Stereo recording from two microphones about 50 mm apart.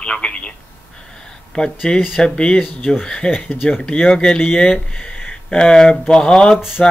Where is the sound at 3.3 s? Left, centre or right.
Left.